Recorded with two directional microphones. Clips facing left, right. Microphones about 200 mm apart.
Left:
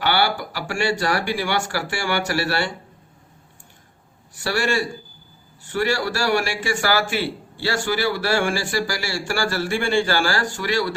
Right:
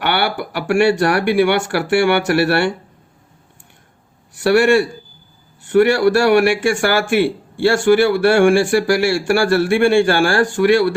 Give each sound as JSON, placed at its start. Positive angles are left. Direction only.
{"t": 0.0, "sound": "speech", "side_deg": -60}
{"t": 4.4, "sound": "speech", "side_deg": -65}